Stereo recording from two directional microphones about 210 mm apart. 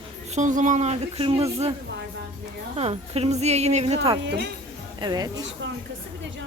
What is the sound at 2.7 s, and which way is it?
Speech, 30° right (ahead or behind).